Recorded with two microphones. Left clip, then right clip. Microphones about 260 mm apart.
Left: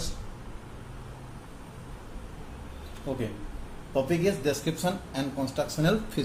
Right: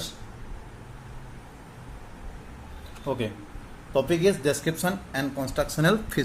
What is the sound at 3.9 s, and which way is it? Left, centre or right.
Speech, right.